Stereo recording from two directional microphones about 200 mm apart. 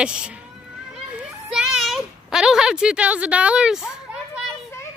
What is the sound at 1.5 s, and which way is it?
Speech, centre (ahead or behind).